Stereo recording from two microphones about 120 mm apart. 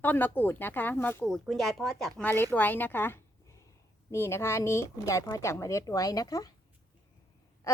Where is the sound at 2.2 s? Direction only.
15° left (ahead or behind); by 6.5 s 30° left (ahead or behind).